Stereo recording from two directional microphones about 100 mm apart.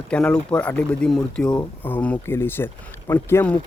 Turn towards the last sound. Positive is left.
turn(degrees=20)  # may be behind; listen again after turning